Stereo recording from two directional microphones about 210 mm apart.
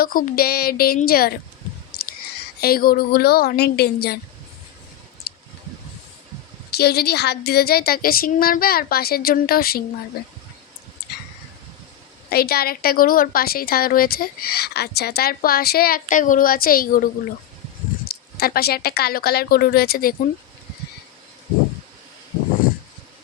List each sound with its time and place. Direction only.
0.0 s speech: 45° left (ahead or behind)
2.6 s speech: 45° left (ahead or behind)
5.3 s a sound: 45° left (ahead or behind)
6.7 s speech: 50° left (ahead or behind)
12.3 s speech: 45° left (ahead or behind)
18.1 s speech: 45° left (ahead or behind)